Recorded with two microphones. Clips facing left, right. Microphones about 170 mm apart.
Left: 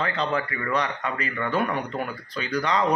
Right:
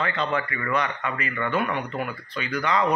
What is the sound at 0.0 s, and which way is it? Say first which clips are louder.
Speech: even; 35° left (ahead or behind).